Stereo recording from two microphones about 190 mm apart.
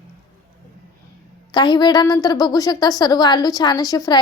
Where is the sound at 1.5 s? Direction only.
25° left (ahead or behind).